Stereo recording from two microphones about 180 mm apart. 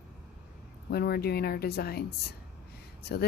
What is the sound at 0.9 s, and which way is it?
Speech, 60° left (ahead or behind).